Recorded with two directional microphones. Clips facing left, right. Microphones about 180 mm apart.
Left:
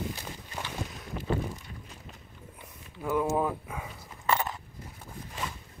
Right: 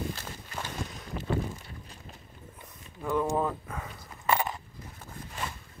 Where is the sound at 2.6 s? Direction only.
10° left (ahead or behind).